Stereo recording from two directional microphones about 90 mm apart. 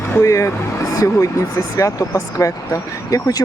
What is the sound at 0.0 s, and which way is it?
Speech, 30° left (ahead or behind).